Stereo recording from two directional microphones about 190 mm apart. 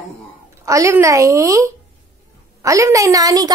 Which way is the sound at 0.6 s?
15° right (ahead or behind).